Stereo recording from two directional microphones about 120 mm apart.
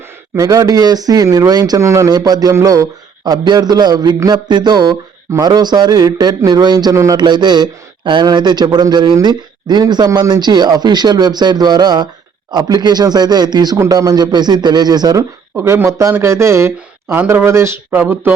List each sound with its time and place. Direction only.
0.3 s speech: 30° right (ahead or behind)
7.2 s speech: 40° right (ahead or behind)
15.5 s speech: 20° right (ahead or behind)